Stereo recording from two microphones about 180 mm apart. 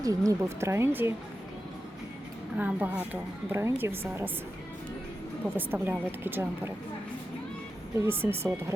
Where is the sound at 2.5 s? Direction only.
10° right (ahead or behind).